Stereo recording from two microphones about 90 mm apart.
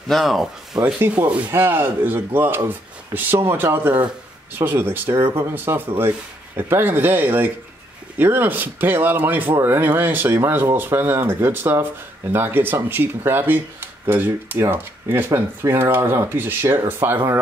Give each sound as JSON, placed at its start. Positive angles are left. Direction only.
{"t": 0.1, "sound": "speech", "side_deg": 0}
{"t": 0.8, "sound": "speech", "side_deg": -20}